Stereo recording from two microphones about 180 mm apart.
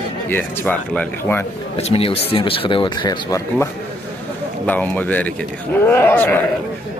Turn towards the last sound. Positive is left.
turn(degrees=10)  # may be behind; listen again after turning